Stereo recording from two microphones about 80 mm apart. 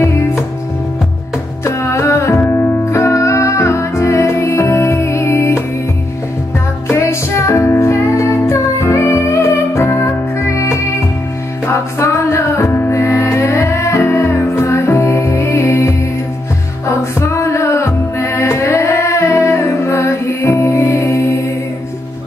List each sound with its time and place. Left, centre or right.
1.6 s music: left
6.9 s music: left
11.7 s music: left